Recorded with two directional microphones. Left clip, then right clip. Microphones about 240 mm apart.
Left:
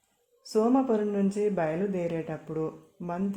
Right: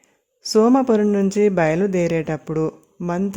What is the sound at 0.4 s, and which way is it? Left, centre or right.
Speech, right.